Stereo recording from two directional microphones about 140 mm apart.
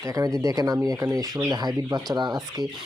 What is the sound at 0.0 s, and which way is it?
Speech, 25° right (ahead or behind).